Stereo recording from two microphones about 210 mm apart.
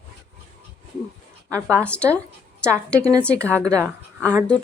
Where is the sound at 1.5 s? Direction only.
5° left (ahead or behind).